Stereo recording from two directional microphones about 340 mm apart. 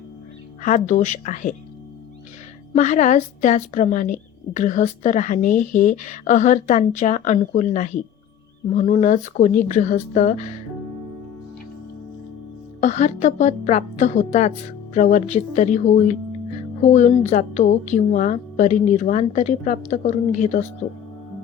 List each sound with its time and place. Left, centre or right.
0.6 s a woman's voice: left
2.7 s a woman's voice: left
12.8 s a woman's voice: left